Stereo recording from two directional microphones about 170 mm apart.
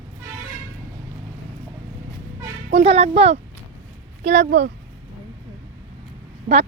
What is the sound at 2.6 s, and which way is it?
Speech, 40° right (ahead or behind).